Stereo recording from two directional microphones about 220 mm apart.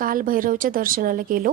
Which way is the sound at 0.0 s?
40° right (ahead or behind).